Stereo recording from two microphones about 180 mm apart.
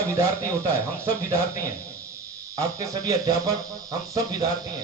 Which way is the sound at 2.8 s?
20° right (ahead or behind).